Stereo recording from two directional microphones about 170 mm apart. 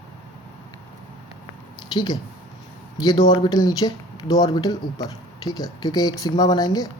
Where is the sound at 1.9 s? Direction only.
25° left (ahead or behind).